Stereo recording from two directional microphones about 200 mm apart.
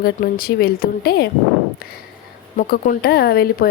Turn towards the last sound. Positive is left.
turn(degrees=50)  # may be behind; listen again after turning